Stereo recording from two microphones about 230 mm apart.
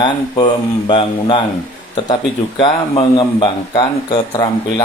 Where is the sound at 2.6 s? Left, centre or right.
Centre.